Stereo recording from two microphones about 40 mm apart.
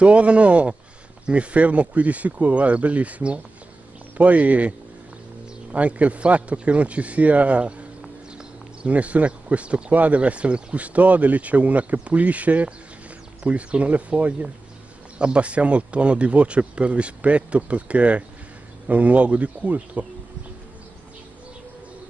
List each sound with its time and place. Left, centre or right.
0.0 s speech: right
8.8 s speech: right